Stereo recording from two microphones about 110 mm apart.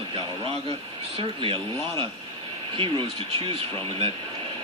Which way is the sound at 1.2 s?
50° right (ahead or behind).